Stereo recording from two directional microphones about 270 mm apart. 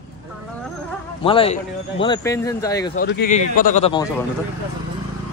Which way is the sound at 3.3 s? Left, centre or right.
Left.